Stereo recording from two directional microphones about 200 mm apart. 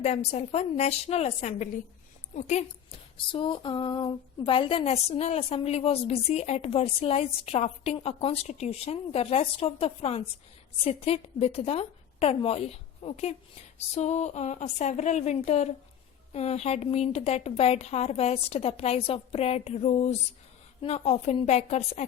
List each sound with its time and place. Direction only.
0.0 s a woman's voice: 35° left (ahead or behind)